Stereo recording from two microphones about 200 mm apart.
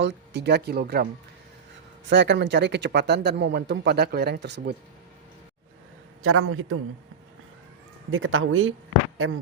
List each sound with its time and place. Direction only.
0.0 s speech: 55° right (ahead or behind)
2.0 s speech: 60° right (ahead or behind)
6.2 s a man's voice: 90° right
8.1 s speech: 85° right